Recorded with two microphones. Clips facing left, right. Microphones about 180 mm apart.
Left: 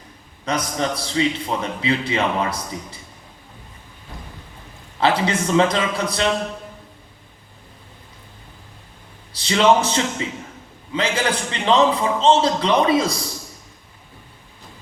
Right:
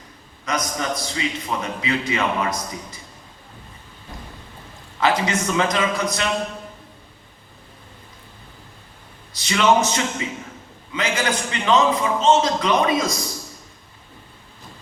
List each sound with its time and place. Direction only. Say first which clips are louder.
0.4 s a man's voice: left 2 dB; 30° left (ahead or behind)
4.9 s a man's voice: left 1 dB; 30° left (ahead or behind)
9.3 s a man's voice: left 2 dB; 30° left (ahead or behind)